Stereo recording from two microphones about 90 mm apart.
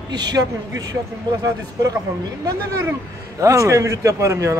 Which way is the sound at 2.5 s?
35° right (ahead or behind).